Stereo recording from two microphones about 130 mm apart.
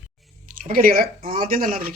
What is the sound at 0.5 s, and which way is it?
Speech, 90° right.